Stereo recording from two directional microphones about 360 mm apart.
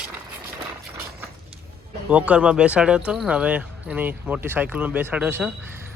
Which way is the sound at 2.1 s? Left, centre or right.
Centre.